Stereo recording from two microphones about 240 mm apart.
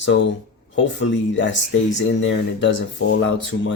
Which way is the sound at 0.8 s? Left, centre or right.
Left.